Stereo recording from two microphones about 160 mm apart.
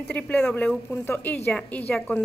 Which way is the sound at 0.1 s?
5° left (ahead or behind).